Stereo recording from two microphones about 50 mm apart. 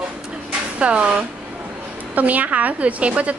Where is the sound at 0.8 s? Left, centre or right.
Right.